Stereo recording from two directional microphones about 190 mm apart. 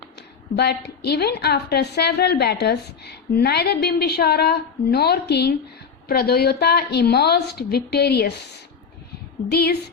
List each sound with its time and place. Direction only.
0.2 s a woman's voice: 60° left (ahead or behind)
9.5 s a woman's voice: 55° left (ahead or behind)